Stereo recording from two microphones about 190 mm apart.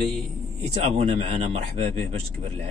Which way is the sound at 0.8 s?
35° right (ahead or behind).